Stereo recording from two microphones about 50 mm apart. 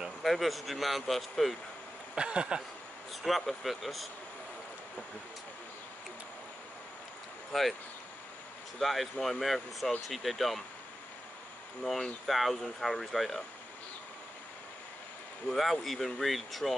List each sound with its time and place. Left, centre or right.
0.2 s speech: centre
2.1 s a sound: centre
3.1 s speech: centre
7.5 s speech: centre
8.7 s speech: centre
11.8 s speech: centre
15.4 s speech: centre